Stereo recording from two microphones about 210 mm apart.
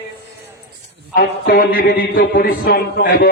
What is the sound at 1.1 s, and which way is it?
A man's voice, 45° left (ahead or behind).